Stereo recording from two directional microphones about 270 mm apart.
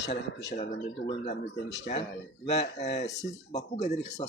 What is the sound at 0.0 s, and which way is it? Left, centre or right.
Speech, left.